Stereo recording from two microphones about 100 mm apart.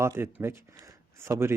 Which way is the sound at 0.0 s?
25° right (ahead or behind).